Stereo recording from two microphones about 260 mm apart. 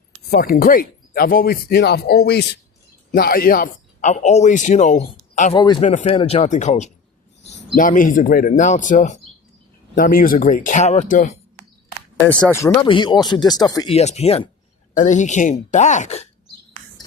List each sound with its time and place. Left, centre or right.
0.3 s speech: left
12.2 s speech: centre; by 16.2 s left